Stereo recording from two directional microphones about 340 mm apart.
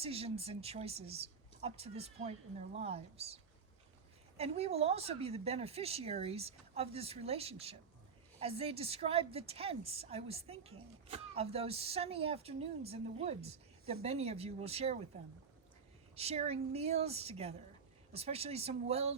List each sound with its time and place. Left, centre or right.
0.0 s a woman's voice: centre